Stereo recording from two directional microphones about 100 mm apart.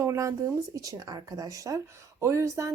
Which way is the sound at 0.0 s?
30° right (ahead or behind).